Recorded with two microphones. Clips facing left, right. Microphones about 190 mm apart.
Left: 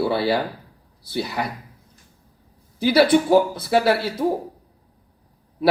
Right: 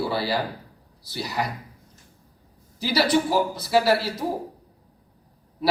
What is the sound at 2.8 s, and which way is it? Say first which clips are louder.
Speech: left 6 dB; 55° left (ahead or behind).